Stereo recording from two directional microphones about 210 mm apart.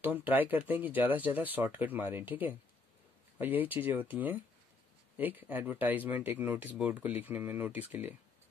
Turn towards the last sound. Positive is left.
turn(degrees=-10)  # may be behind; listen again after turning